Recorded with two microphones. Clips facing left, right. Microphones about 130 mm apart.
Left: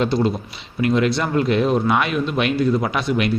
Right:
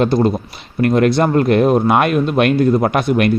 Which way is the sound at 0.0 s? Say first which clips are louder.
Right 5 dB; 50° right (ahead or behind).